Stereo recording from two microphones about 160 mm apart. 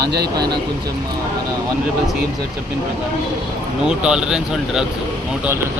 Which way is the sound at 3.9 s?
5° right (ahead or behind).